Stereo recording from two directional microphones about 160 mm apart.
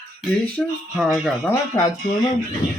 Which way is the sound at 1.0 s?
5° right (ahead or behind).